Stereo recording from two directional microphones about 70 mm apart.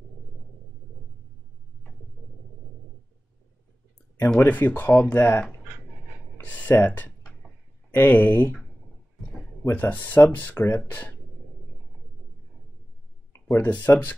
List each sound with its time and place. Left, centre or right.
4.4 s speech: left
6.3 s typing: left
7.9 s speech: left
9.7 s speech: left
13.6 s speech: left